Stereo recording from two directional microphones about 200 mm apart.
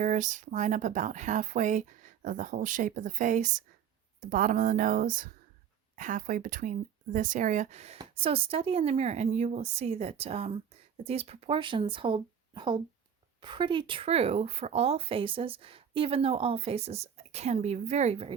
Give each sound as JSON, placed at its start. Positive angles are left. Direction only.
{"t": 0.0, "sound": "speech", "side_deg": -40}